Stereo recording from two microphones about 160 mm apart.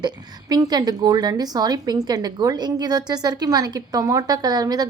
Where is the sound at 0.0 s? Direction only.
25° right (ahead or behind).